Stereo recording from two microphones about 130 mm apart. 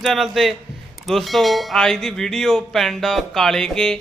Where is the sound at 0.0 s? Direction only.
Centre (ahead or behind).